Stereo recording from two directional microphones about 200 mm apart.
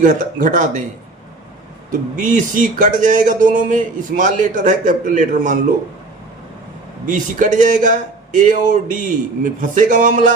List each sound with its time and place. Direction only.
0.0 s speech: 40° right (ahead or behind)
1.9 s speech: 40° right (ahead or behind)
7.0 s speech: 40° right (ahead or behind)